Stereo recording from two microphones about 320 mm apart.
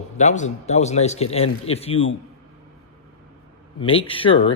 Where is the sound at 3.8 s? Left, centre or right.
Centre.